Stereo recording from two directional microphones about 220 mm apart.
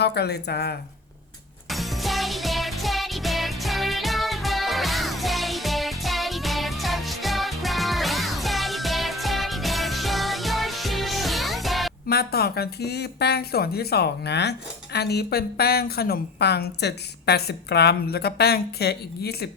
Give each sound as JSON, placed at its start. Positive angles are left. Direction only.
{"t": 0.0, "sound": "speech", "side_deg": 50}
{"t": 1.7, "sound": "music", "side_deg": 0}
{"t": 12.0, "sound": "speech", "side_deg": 45}